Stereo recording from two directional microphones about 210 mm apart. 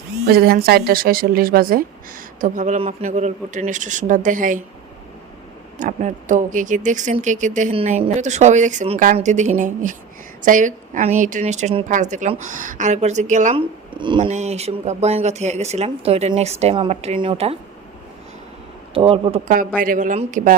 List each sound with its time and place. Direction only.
0.3 s a woman's voice: 45° right (ahead or behind)
5.8 s speech: 35° right (ahead or behind)
13.9 s speech: 20° right (ahead or behind)
14.3 s speech: 35° right (ahead or behind)
18.9 s a man's voice: 25° right (ahead or behind)
19.8 s speech: 40° right (ahead or behind)